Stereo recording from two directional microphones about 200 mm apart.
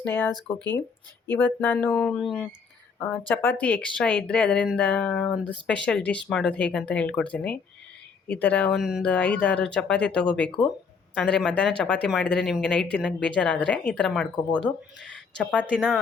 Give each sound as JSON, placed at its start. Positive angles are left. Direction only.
{"t": 0.0, "sound": "speech", "side_deg": 10}
{"t": 15.5, "sound": "speech", "side_deg": -5}